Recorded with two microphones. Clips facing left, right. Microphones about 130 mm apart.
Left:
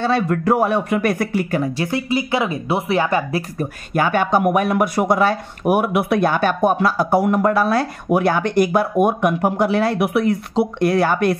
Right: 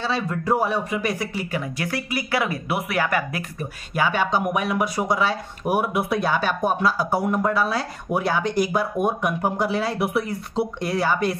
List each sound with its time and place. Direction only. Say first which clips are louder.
0.0 s speech: left 7 dB; 55° left (ahead or behind)
1.6 s speech: left 7 dB; 25° left (ahead or behind)
3.5 s speech: left 4 dB; 50° left (ahead or behind)